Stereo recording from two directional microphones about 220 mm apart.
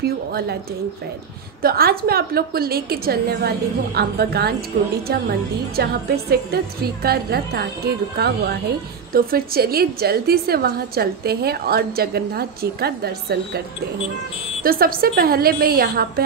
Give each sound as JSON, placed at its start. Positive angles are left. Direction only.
{"t": 0.0, "sound": "a woman's voice", "side_deg": -45}
{"t": 1.6, "sound": "a woman's voice", "side_deg": -45}
{"t": 5.8, "sound": "a woman's voice", "side_deg": -45}
{"t": 14.6, "sound": "a woman's voice", "side_deg": -40}